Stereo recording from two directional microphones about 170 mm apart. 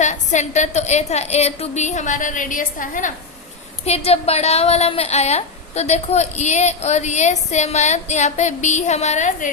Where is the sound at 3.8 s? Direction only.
35° left (ahead or behind).